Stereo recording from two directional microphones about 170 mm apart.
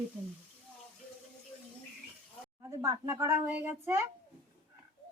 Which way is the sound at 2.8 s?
15° right (ahead or behind).